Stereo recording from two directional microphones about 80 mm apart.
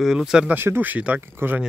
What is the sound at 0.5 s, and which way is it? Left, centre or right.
Speech, right.